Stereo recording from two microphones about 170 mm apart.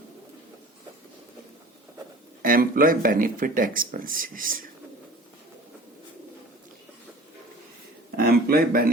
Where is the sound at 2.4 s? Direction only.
55° right (ahead or behind).